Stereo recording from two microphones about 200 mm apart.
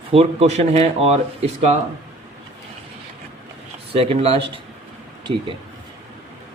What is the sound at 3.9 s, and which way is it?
Speech, 30° right (ahead or behind).